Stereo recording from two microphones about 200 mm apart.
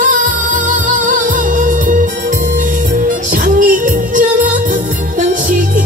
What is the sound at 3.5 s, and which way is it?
Music, 40° right (ahead or behind).